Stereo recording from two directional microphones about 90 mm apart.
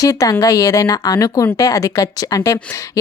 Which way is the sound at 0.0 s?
40° left (ahead or behind).